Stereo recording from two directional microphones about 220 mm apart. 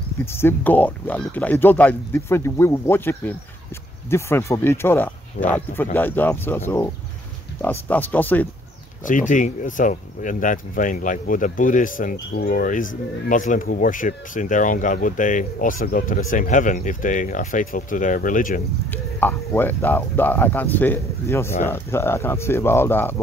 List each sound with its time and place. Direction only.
0.2 s speech: 10° left (ahead or behind)
7.9 s speech: 10° left (ahead or behind)
9.0 s speech: 35° left (ahead or behind)
18.9 s speech: 10° left (ahead or behind)